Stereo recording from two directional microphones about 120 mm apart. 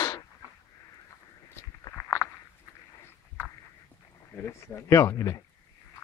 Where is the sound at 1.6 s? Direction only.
20° left (ahead or behind).